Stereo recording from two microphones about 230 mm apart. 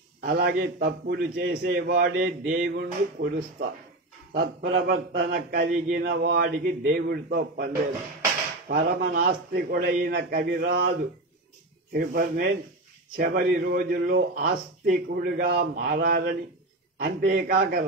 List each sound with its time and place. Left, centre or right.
0.2 s a man's voice: right
11.9 s a man's voice: right